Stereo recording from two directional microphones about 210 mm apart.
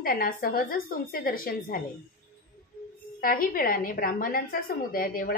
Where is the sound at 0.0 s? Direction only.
45° left (ahead or behind).